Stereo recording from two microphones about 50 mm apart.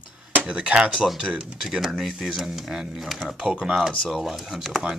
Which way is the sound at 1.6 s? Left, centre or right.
Centre.